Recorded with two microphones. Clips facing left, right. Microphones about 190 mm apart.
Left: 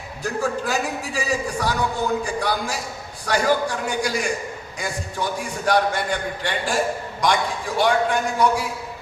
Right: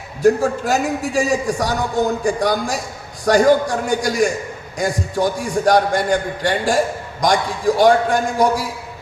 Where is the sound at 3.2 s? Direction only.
45° right (ahead or behind).